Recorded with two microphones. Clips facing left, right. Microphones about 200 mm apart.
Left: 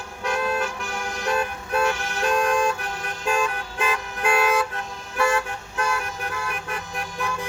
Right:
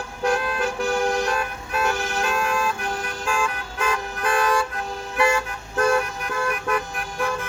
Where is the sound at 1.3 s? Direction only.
30° left (ahead or behind).